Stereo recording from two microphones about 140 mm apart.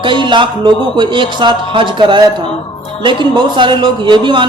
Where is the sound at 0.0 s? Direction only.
35° right (ahead or behind).